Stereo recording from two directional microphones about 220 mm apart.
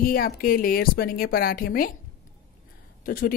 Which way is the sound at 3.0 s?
40° left (ahead or behind).